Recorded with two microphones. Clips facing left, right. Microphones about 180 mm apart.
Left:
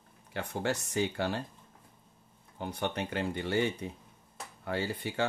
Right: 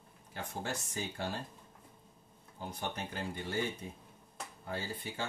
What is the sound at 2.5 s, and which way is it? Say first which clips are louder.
Speech: left 6 dB; 70° left (ahead or behind).